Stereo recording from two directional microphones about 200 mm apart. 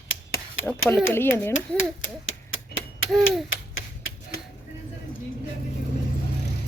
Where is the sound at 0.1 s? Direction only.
75° left (ahead or behind).